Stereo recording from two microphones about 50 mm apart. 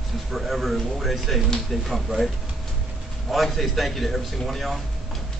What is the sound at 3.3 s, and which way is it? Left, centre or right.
A man's voice, centre.